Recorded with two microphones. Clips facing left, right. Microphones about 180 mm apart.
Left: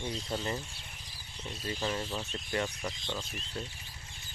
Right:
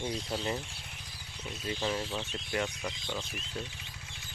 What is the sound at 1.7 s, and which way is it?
Speech, centre (ahead or behind).